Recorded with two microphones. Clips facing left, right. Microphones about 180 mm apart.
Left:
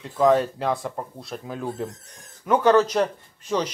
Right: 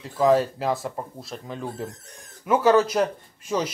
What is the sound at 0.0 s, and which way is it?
Speech, centre (ahead or behind).